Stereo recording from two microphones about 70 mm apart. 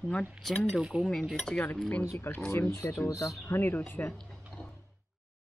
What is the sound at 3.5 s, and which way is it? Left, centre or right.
Speech, left.